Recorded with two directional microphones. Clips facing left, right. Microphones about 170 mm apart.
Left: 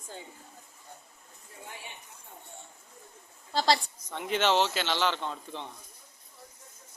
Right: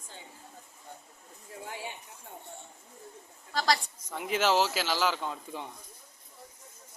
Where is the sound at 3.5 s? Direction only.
30° left (ahead or behind).